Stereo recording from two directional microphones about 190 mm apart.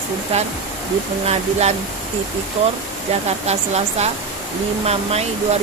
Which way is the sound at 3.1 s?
35° right (ahead or behind).